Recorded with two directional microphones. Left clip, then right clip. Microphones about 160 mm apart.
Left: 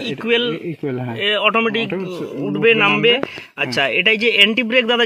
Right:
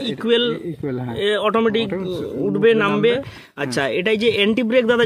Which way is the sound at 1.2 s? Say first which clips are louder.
Left 2 dB; 80° right.